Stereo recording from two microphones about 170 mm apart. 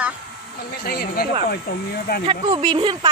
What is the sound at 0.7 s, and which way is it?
Speech, 65° left (ahead or behind).